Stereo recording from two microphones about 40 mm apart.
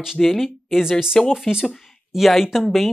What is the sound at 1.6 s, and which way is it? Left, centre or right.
Speech, centre.